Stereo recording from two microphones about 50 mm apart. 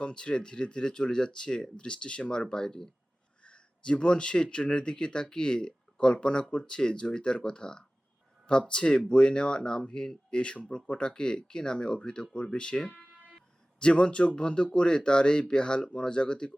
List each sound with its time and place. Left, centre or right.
0.0 s speech: centre
3.4 s speech: left